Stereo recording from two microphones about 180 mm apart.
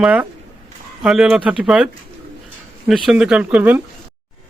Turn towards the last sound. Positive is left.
turn(degrees=-10)  # may be behind; listen again after turning